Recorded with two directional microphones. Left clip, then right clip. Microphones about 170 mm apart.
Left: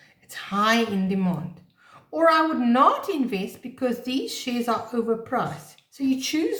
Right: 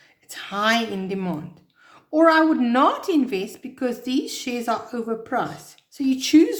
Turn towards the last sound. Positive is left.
turn(degrees=-45)  # may be behind; listen again after turning